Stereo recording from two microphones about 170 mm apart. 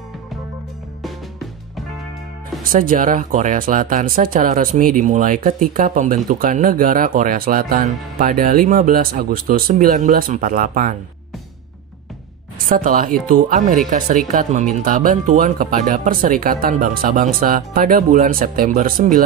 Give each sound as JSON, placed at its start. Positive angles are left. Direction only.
{"t": 2.6, "sound": "speech", "side_deg": -55}
{"t": 12.6, "sound": "speech", "side_deg": -55}